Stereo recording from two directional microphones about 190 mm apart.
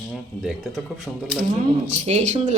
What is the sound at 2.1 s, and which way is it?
Speech, 35° right (ahead or behind).